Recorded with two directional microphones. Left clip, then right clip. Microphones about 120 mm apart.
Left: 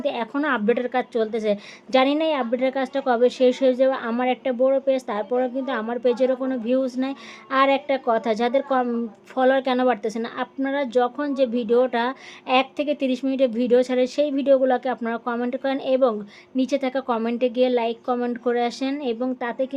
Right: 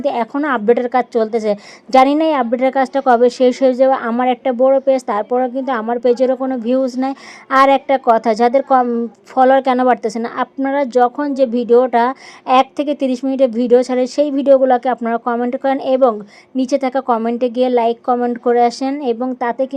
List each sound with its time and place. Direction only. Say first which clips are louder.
0.0 s a woman's voice: right 7 dB; 40° right (ahead or behind)